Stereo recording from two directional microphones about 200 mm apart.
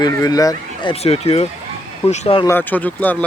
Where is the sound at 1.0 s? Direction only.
30° left (ahead or behind).